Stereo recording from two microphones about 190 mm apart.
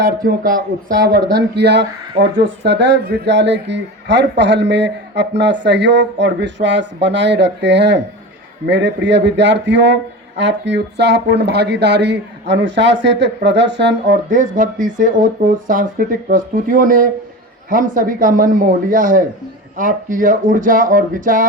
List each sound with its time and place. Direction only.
0.3 s speech: 50° right (ahead or behind)
1.0 s speech: 60° right (ahead or behind)
14.1 s speech: 45° right (ahead or behind)